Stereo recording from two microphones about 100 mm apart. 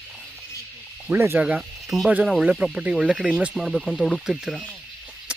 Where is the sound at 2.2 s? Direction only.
5° right (ahead or behind).